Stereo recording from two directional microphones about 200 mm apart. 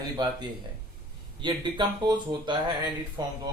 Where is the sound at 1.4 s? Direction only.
20° right (ahead or behind).